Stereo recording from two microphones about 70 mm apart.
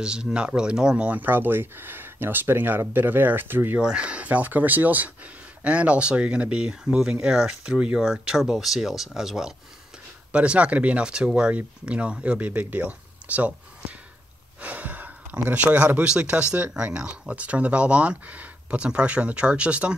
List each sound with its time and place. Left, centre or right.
0.0 s speech: centre; by 3.8 s right
3.8 s speech: centre